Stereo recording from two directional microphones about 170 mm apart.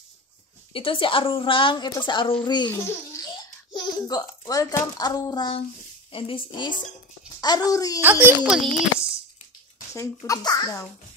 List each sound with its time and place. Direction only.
0.7 s a woman's voice: 30° left (ahead or behind)
3.7 s a woman's voice: 20° left (ahead or behind)
7.3 s a sound: 25° left (ahead or behind)
7.7 s a woman's voice: 20° left (ahead or behind)
8.0 s a child's voice: 10° right (ahead or behind)
9.9 s a woman's voice: 20° left (ahead or behind)